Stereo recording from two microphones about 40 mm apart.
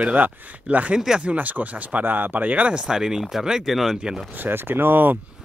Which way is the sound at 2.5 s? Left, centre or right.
Right.